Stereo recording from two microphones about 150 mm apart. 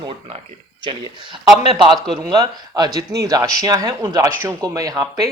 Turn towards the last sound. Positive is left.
turn(degrees=-20)  # may be behind; listen again after turning